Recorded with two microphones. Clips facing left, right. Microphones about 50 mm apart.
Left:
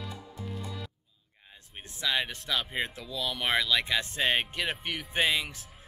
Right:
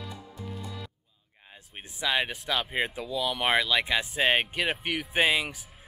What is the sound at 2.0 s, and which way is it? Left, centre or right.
Speech, centre.